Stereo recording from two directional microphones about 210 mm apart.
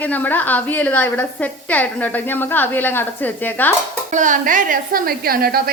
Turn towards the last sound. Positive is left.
turn(degrees=-45)  # may be behind; listen again after turning